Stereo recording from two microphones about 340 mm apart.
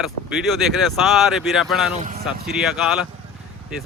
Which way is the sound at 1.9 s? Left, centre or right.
Right.